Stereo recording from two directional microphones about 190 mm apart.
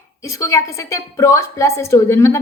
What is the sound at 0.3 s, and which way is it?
A woman's voice, 15° left (ahead or behind).